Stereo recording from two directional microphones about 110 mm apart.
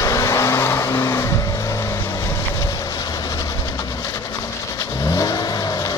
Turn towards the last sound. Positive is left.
turn(degrees=35)  # may be behind; listen again after turning